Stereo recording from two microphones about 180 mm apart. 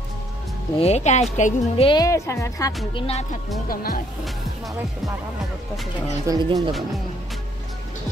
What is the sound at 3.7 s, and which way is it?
Speech, 55° left (ahead or behind).